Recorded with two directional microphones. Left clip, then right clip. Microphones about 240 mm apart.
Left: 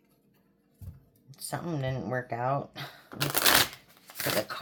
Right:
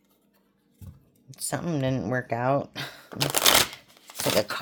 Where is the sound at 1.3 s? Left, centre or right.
Right.